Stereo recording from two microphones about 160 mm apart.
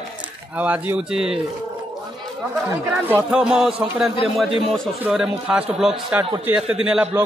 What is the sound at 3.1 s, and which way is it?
A man's voice, 10° right (ahead or behind).